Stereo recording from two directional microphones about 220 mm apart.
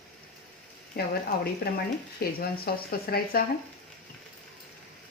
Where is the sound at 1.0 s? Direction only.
45° left (ahead or behind).